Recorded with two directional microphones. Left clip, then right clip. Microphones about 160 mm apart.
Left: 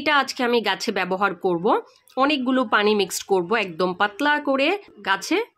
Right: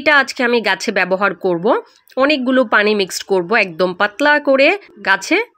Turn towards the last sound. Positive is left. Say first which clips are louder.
# right 7 dB
turn(degrees=-20)  # may be behind; listen again after turning